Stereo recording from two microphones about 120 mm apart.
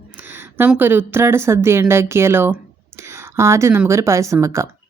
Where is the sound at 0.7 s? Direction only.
15° right (ahead or behind).